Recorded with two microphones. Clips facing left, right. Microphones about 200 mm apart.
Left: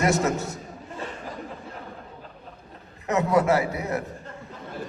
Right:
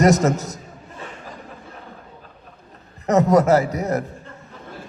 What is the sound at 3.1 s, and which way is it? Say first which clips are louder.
Speech: right 6 dB; 40° right (ahead or behind).